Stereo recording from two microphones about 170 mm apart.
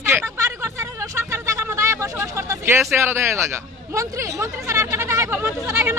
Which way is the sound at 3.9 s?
15° right (ahead or behind).